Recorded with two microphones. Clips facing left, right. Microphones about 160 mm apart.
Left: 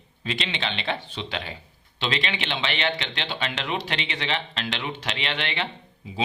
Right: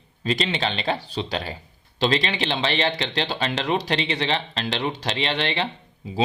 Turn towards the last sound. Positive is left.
turn(degrees=-35)  # may be behind; listen again after turning